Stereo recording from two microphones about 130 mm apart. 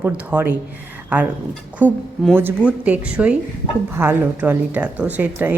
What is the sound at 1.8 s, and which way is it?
A woman's voice, 15° right (ahead or behind).